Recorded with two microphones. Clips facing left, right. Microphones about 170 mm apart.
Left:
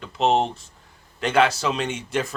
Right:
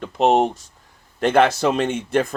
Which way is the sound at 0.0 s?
50° right (ahead or behind).